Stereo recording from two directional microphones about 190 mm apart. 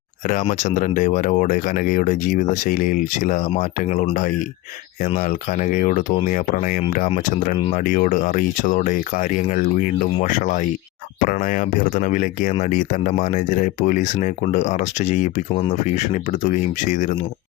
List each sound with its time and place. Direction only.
0.3 s speech: 40° left (ahead or behind)